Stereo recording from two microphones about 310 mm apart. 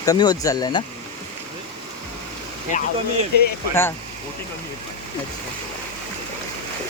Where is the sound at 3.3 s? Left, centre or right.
Left.